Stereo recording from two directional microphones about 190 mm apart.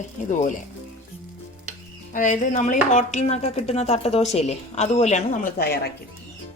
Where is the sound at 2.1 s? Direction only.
40° left (ahead or behind).